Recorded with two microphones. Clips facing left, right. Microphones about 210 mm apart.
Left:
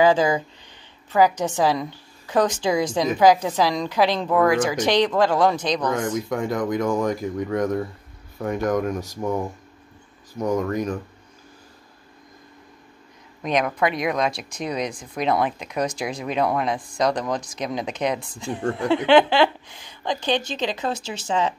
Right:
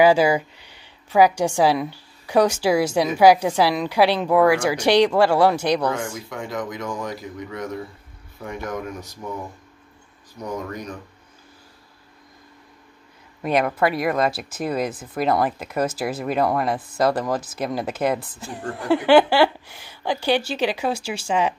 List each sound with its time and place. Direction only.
0.0 s a woman's voice: 10° right (ahead or behind)
6.2 s speech: 45° left (ahead or behind)
10.3 s speech: 45° left (ahead or behind)
13.4 s a woman's voice: 5° right (ahead or behind)